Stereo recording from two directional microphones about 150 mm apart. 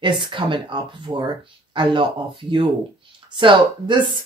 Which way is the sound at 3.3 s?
30° right (ahead or behind).